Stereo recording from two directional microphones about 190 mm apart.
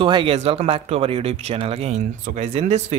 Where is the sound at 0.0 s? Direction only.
25° right (ahead or behind).